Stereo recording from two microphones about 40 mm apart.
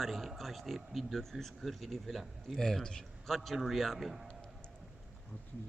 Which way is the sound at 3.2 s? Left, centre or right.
Centre.